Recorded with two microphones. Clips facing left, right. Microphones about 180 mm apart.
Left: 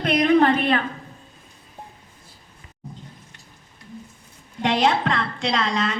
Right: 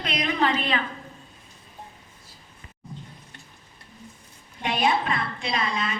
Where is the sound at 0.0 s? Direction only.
55° left (ahead or behind).